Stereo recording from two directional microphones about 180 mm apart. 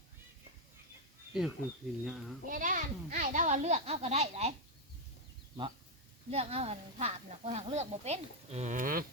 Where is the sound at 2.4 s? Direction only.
50° right (ahead or behind).